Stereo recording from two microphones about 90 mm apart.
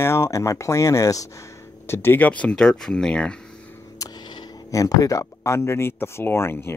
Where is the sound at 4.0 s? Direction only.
50° left (ahead or behind).